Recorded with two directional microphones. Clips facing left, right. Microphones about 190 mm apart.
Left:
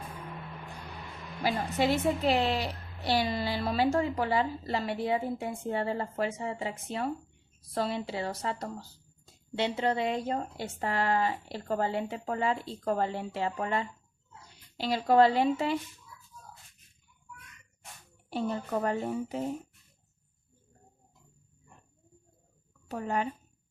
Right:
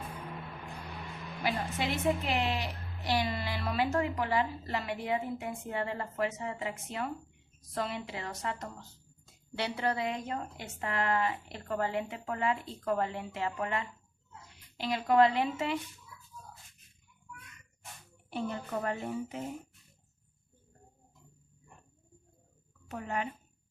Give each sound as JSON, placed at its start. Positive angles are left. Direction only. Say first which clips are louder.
{"t": 1.5, "sound": "speech", "louder": "left 5 dB", "side_deg": 35}
{"t": 18.3, "sound": "speech", "louder": "left 4 dB", "side_deg": 35}
{"t": 22.9, "sound": "speech", "louder": "left 4 dB", "side_deg": 35}